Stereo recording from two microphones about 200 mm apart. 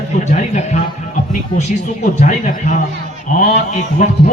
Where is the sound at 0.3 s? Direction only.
35° left (ahead or behind).